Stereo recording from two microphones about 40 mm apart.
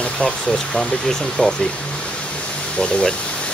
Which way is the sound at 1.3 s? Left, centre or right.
Left.